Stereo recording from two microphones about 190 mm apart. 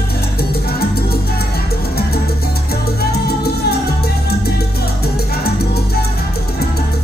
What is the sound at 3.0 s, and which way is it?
Salsa music, 55° left (ahead or behind).